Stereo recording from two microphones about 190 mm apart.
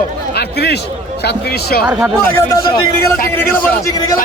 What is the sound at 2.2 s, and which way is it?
Speech, 15° left (ahead or behind).